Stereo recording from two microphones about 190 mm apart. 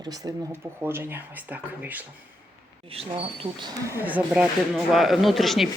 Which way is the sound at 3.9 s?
10° right (ahead or behind).